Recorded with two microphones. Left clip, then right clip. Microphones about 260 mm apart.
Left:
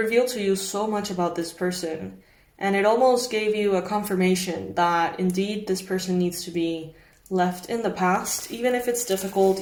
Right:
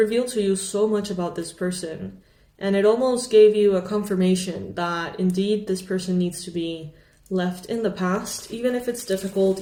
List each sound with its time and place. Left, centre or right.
0.1 s speech: centre